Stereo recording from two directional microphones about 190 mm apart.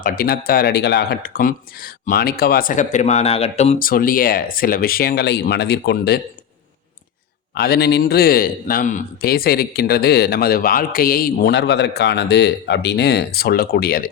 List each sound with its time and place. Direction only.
0.0 s speech: 50° left (ahead or behind); by 3.8 s 35° left (ahead or behind)
3.8 s speech: 50° left (ahead or behind)
7.5 s a man's voice: 55° left (ahead or behind)